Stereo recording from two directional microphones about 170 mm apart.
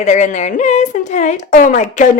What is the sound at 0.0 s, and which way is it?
A woman's voice, 45° left (ahead or behind).